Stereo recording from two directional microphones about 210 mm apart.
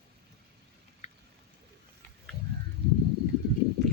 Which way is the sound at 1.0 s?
35° left (ahead or behind).